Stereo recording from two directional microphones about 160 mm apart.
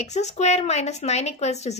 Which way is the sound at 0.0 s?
45° left (ahead or behind).